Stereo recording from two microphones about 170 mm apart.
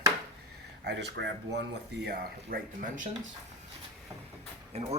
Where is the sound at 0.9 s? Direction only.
90° right.